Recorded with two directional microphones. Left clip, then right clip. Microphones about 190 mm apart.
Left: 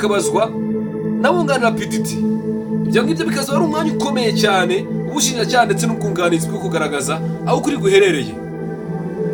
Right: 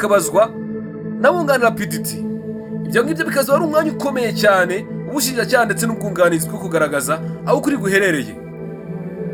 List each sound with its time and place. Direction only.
0.0 s speech: 40° right (ahead or behind)
2.9 s speech: 40° right (ahead or behind)